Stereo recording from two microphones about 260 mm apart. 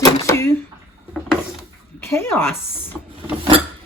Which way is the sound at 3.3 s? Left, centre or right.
Centre.